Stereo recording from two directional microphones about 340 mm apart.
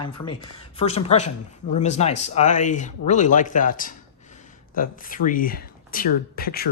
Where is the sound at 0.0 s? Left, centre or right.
Left.